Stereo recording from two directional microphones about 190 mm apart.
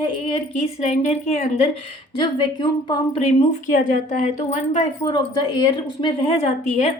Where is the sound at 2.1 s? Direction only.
25° left (ahead or behind).